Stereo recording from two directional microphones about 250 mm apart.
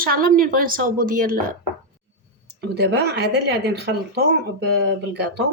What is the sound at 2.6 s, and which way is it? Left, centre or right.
Speech, right.